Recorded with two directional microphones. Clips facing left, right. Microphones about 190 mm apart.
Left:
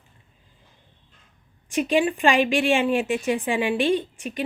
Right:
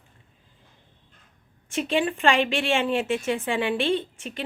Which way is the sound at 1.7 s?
15° left (ahead or behind).